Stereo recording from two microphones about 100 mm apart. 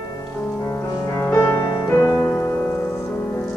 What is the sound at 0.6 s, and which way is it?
Music, 25° left (ahead or behind).